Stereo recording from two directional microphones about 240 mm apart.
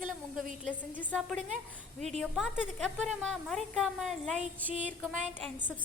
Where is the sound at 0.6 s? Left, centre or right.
Centre.